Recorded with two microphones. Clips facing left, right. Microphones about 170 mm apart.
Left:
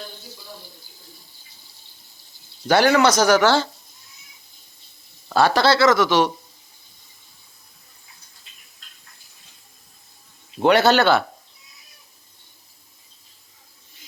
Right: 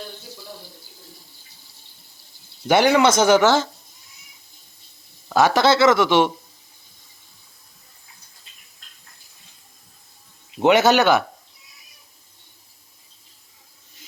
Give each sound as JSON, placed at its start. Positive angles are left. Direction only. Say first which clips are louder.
{"t": 2.6, "sound": "speech", "louder": "even", "side_deg": -20}
{"t": 5.3, "sound": "speech", "louder": "right 1 dB", "side_deg": -15}
{"t": 10.5, "sound": "speech", "louder": "right 1 dB", "side_deg": -20}